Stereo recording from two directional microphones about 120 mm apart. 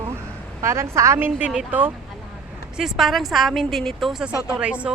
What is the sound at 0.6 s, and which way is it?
Speech, 25° right (ahead or behind).